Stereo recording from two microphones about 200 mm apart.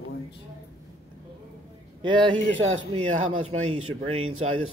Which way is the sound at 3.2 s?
90° right.